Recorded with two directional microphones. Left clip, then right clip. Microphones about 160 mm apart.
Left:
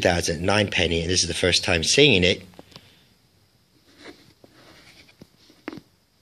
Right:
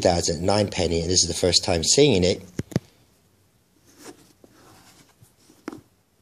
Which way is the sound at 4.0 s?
45° right (ahead or behind).